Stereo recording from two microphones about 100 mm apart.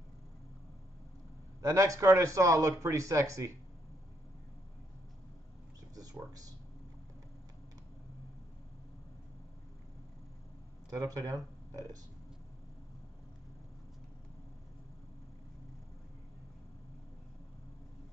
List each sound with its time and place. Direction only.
1.6 s speech: 35° right (ahead or behind)
5.9 s a sound: 35° right (ahead or behind)
10.9 s speech: 35° right (ahead or behind)